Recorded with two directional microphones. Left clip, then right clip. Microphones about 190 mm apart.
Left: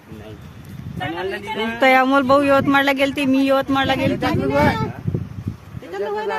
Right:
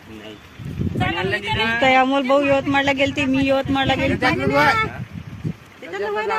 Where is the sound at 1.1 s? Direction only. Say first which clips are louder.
Right 3 dB; 10° left (ahead or behind).